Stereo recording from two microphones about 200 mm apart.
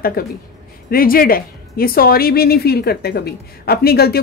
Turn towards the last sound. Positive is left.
turn(degrees=50)  # may be behind; listen again after turning